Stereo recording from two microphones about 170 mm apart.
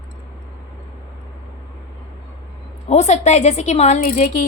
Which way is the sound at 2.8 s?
40° left (ahead or behind).